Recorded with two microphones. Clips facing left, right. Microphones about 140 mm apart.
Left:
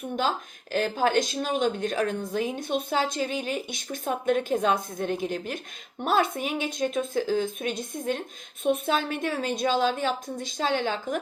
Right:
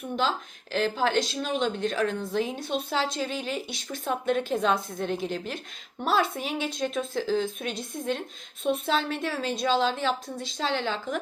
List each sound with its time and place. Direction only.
0.2 s speech: 45° left (ahead or behind)